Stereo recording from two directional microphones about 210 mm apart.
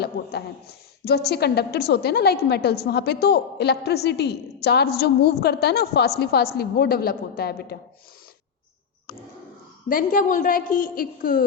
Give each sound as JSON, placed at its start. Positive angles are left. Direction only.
{"t": 0.0, "sound": "a woman's voice", "side_deg": 50}
{"t": 9.9, "sound": "a woman's voice", "side_deg": 40}